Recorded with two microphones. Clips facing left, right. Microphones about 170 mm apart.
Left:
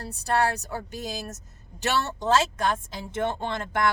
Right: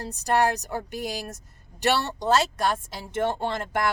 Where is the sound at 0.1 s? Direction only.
20° right (ahead or behind).